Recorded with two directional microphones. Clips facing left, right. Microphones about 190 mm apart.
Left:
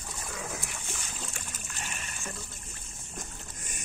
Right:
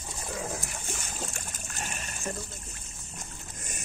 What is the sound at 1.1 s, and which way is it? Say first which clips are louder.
Splash: right 3 dB; 45° right (ahead or behind).